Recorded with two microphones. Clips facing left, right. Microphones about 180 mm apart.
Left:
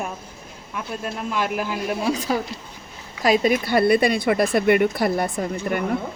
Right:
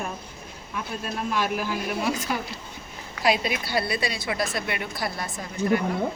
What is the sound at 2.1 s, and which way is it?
Speech, 35° left (ahead or behind).